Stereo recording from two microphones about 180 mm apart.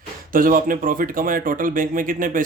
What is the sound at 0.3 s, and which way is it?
A man's voice, 50° right (ahead or behind).